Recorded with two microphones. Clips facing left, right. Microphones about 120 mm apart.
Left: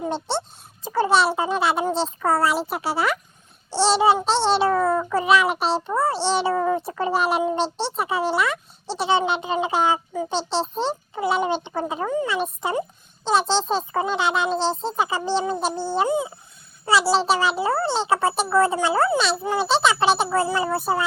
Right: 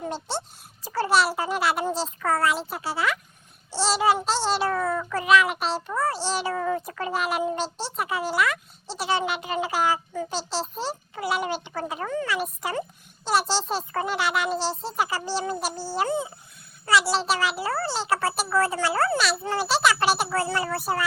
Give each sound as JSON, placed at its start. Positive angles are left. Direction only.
{"t": 0.9, "sound": "speech", "side_deg": 20}
{"t": 2.6, "sound": "speech", "side_deg": 65}
{"t": 3.9, "sound": "speech", "side_deg": 25}
{"t": 4.3, "sound": "a child's voice", "side_deg": 0}
{"t": 4.8, "sound": "speech", "side_deg": 25}
{"t": 15.7, "sound": "speech", "side_deg": 60}
{"t": 16.0, "sound": "speech", "side_deg": 15}
{"t": 16.8, "sound": "speech", "side_deg": 30}